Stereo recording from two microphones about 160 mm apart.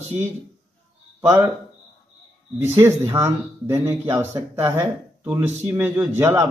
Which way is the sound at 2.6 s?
15° right (ahead or behind).